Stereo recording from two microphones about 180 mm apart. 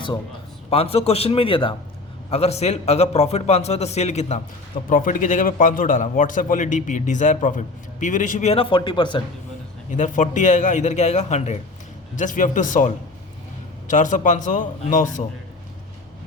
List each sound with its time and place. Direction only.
0.7 s a man's voice: 35° left (ahead or behind)
4.9 s a man's voice: 50° left (ahead or behind); by 9.2 s 25° left (ahead or behind)
9.9 s a man's voice: 45° left (ahead or behind)